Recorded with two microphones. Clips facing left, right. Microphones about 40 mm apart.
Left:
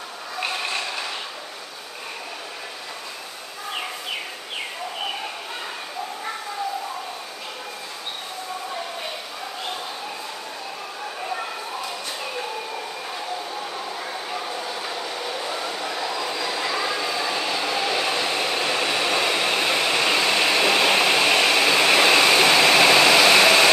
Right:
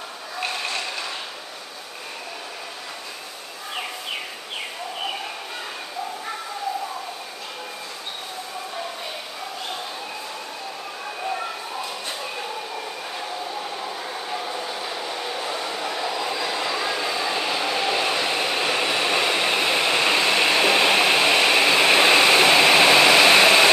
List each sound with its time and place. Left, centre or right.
0.4 s vehicle: centre
13.6 s train: centre